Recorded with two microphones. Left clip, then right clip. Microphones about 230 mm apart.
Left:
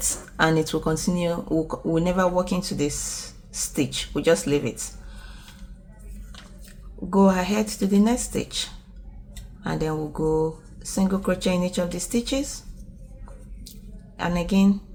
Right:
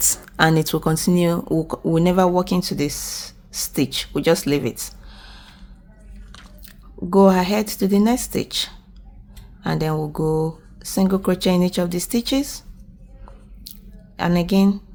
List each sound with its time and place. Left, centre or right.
0.0 s speech: right
7.1 s speech: right
14.2 s speech: right